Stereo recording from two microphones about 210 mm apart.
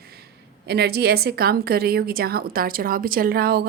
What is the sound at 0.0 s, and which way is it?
A woman's voice, 50° right (ahead or behind).